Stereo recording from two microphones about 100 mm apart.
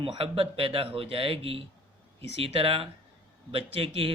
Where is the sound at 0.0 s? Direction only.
65° right (ahead or behind).